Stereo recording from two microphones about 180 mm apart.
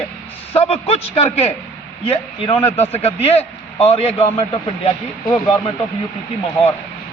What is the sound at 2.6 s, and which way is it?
A man's voice, 35° left (ahead or behind).